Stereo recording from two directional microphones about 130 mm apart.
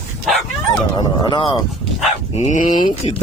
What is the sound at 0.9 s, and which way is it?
Speech, 35° left (ahead or behind).